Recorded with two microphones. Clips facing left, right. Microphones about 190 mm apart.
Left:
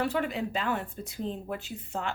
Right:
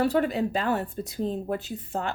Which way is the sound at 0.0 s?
40° right (ahead or behind).